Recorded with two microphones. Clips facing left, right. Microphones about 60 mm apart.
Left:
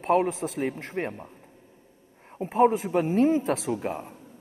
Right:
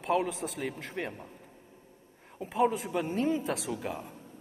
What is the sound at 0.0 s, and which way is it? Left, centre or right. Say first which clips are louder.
A man's voice: left 6 dB; left.